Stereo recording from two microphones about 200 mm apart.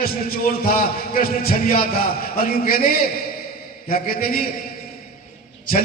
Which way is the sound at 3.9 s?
45° left (ahead or behind).